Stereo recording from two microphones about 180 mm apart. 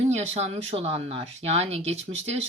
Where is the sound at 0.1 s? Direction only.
35° right (ahead or behind).